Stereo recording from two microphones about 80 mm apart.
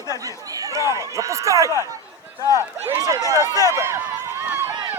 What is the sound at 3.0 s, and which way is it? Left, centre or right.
Speech, right.